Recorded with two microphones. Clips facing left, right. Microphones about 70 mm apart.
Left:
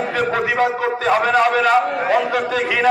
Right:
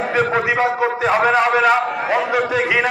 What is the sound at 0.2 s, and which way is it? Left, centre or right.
A man's voice, right.